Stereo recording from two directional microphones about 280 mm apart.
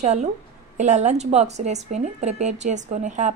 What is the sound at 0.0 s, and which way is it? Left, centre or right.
Speech, right.